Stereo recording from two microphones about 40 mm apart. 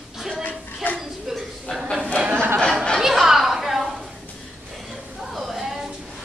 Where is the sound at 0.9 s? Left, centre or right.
Centre.